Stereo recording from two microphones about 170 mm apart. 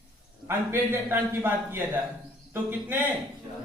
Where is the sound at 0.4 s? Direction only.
15° right (ahead or behind).